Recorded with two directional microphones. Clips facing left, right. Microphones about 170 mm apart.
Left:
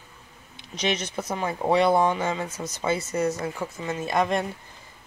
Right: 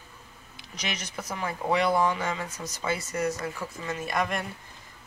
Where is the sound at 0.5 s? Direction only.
25° left (ahead or behind).